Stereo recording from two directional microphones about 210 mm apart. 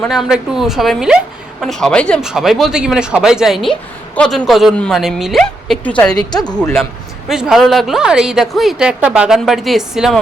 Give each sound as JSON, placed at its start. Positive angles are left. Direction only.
{"t": 0.0, "sound": "speech", "side_deg": 0}
{"t": 6.1, "sound": "a woman's voice", "side_deg": 20}
{"t": 6.5, "sound": "speech", "side_deg": 5}